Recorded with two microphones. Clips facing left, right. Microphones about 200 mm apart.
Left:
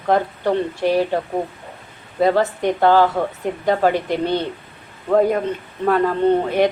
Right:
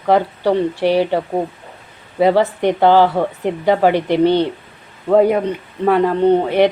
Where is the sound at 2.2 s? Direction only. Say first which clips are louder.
Right 3 dB; 15° right (ahead or behind).